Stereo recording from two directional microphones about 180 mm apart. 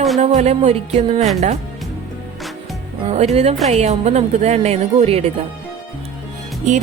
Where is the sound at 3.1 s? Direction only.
40° right (ahead or behind).